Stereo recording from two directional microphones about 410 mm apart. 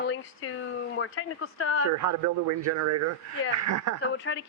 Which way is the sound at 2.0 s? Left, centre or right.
Right.